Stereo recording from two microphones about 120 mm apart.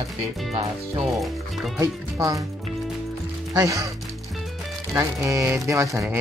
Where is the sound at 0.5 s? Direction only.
55° right (ahead or behind).